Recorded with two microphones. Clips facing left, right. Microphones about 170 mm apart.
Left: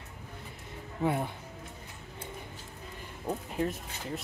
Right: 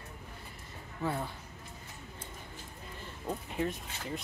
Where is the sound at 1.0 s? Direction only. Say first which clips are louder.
Left 5 dB; 20° left (ahead or behind).